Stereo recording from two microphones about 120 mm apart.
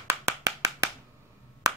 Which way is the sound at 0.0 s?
25° right (ahead or behind).